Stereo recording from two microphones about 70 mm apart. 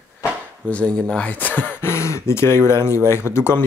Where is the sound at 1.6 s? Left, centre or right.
Left.